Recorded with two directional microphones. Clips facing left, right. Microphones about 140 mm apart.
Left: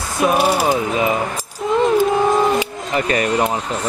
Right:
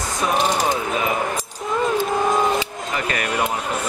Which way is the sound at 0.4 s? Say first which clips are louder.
Left 2 dB; 10° left (ahead or behind).